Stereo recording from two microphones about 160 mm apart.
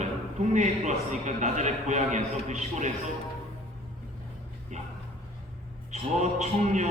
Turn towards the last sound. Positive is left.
turn(degrees=-45)  # may be behind; listen again after turning